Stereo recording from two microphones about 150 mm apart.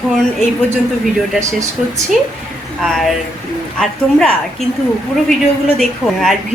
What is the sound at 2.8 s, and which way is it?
A woman's voice, centre (ahead or behind).